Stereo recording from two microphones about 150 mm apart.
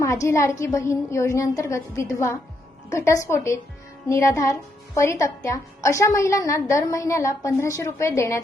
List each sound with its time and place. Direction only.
0.0 s a woman's voice: 20° left (ahead or behind)